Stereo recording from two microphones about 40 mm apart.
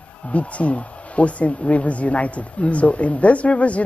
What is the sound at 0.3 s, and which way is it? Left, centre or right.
Speech, left.